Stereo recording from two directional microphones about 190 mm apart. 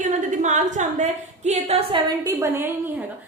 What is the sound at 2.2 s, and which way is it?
Speech, 15° right (ahead or behind).